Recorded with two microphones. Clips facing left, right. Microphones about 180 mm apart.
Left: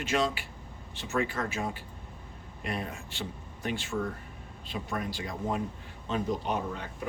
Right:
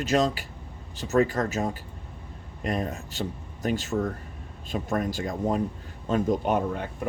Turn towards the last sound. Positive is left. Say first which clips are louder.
# right 7 dB
turn(degrees=-55)  # may be behind; listen again after turning